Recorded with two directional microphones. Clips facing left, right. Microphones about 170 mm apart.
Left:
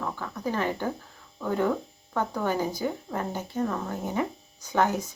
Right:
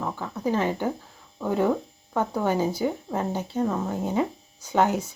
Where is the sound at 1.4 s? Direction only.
20° right (ahead or behind).